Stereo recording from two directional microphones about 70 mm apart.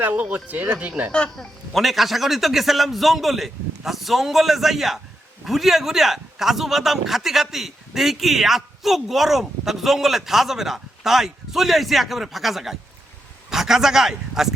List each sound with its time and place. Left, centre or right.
0.0 s speech: right
1.1 s speech: centre
1.7 s a man's voice: centre